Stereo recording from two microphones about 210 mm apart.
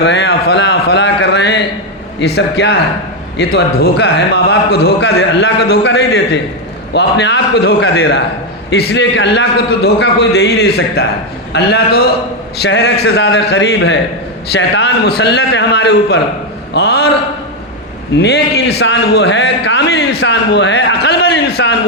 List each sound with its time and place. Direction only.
0.0 s a sound: 55° left (ahead or behind)
2.2 s a man's voice: 50° left (ahead or behind)
18.2 s a man's voice: 50° left (ahead or behind)